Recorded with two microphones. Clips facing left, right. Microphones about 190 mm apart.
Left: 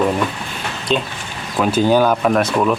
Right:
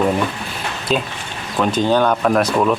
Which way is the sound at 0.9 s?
5° right (ahead or behind).